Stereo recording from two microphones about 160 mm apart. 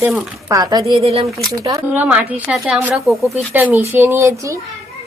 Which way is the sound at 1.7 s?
10° right (ahead or behind).